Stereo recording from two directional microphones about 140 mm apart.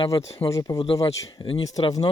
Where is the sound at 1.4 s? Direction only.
35° left (ahead or behind).